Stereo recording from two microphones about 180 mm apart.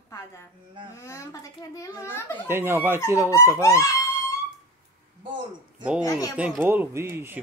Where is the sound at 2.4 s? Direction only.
10° right (ahead or behind).